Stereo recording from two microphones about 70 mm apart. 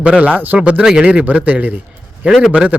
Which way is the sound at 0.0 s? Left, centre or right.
Centre.